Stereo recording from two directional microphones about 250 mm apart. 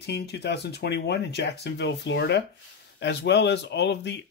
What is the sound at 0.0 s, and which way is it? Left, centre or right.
Speech, left.